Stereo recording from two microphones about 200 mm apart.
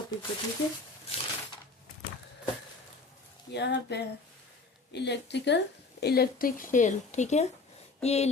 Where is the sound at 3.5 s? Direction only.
60° left (ahead or behind).